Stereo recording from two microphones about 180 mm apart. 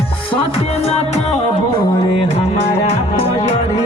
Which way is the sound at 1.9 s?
25° left (ahead or behind).